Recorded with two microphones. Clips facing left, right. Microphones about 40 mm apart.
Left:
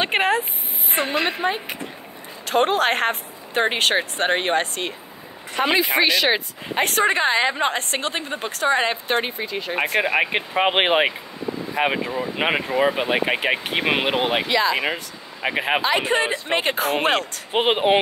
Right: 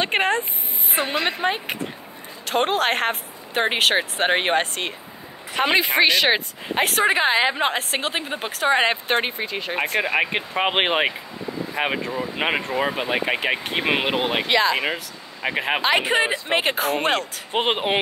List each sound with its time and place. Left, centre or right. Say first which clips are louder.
0.0 s speech: left 1 dB; centre
1.4 s speech: even; right
2.4 s speech: left 2 dB; centre
4.3 s speech: right 1 dB; right
5.6 s speech: right 1 dB; right
6.7 s speech: even; centre
7.1 s a woman's voice: even; centre
8.6 s speech: right 1 dB; right
10.1 s speech: left 1 dB; centre
14.5 s speech: right 3 dB; right
15.4 s speech: left 1 dB; centre
16.0 s a woman's voice: even; centre